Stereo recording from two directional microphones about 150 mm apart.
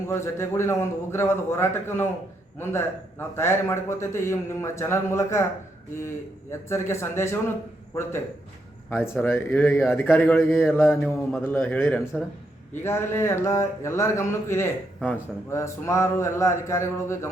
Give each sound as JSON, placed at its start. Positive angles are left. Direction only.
{"t": 0.1, "sound": "speech", "side_deg": 15}
{"t": 6.5, "sound": "speech", "side_deg": 15}
{"t": 8.9, "sound": "speech", "side_deg": 15}